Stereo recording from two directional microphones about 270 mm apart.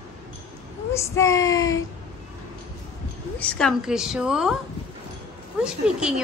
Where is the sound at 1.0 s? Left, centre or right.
Centre.